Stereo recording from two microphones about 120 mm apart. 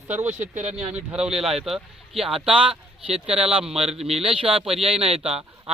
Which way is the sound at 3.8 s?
55° right (ahead or behind).